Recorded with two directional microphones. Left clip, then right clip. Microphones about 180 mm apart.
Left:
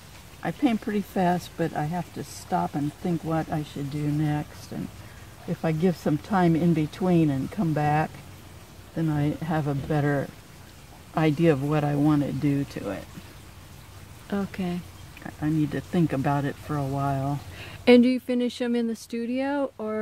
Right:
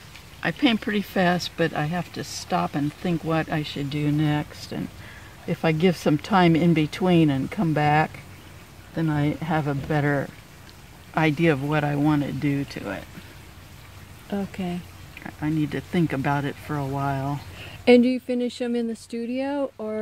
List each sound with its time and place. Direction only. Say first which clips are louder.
0.4 s speech: right 4 dB; 15° right (ahead or behind)
1.4 s speech: right 4 dB; 35° right (ahead or behind); by 3.8 s 20° right (ahead or behind)
4.2 s speech: right 4 dB; 10° right (ahead or behind); by 10.3 s 10° left (ahead or behind)
11.1 s speech: right 1 dB; 20° left (ahead or behind)
14.3 s speech: even; centre (ahead or behind)
15.2 s speech: even; 25° left (ahead or behind)
17.6 s speech: right 1 dB; centre (ahead or behind)